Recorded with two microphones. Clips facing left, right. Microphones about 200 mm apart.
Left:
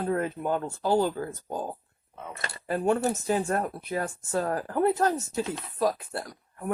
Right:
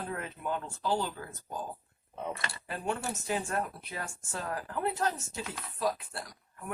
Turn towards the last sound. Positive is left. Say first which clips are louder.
# left 7 dB
turn(degrees=45)  # may be behind; listen again after turning